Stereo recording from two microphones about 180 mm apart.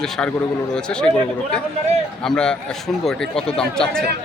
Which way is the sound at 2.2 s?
5° left (ahead or behind).